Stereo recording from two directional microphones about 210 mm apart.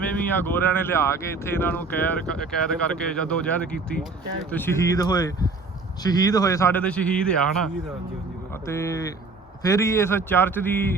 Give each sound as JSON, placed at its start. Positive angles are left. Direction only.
{"t": 0.0, "sound": "speech", "side_deg": 10}
{"t": 8.6, "sound": "speech", "side_deg": 15}